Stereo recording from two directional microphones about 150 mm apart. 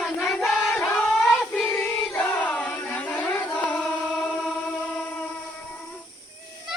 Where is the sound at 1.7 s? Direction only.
5° left (ahead or behind).